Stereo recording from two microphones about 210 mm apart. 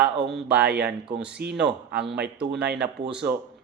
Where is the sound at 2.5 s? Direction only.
55° right (ahead or behind).